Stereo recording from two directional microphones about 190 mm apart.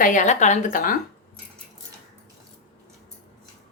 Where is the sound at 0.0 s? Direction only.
40° left (ahead or behind).